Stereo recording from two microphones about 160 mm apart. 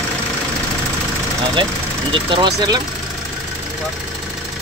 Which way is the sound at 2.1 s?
30° right (ahead or behind).